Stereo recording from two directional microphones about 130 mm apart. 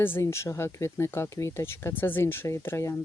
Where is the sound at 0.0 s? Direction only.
20° left (ahead or behind).